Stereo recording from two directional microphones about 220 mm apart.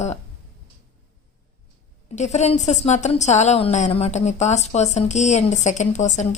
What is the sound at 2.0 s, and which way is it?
A woman's voice, 30° left (ahead or behind).